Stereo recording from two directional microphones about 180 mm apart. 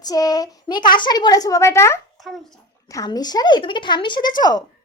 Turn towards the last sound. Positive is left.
turn(degrees=25)  # may be behind; listen again after turning